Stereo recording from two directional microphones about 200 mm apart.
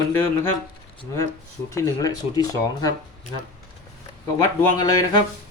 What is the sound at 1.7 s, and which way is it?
Speech, 15° left (ahead or behind).